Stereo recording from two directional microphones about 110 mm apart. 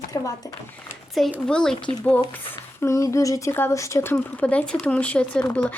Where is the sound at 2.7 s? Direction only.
25° left (ahead or behind).